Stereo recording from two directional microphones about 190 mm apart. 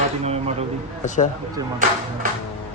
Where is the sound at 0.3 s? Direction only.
35° right (ahead or behind).